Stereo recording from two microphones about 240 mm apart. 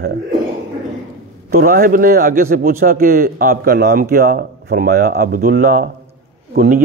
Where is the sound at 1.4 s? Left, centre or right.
Right.